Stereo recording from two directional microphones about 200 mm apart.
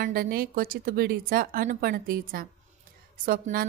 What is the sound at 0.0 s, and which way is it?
Speech, 45° right (ahead or behind).